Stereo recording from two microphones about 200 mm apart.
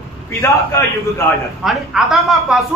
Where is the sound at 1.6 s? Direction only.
Centre (ahead or behind).